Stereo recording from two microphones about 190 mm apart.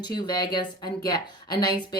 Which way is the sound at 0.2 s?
20° left (ahead or behind).